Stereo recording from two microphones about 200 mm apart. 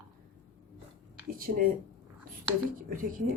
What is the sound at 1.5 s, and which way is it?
Speech, 60° right (ahead or behind).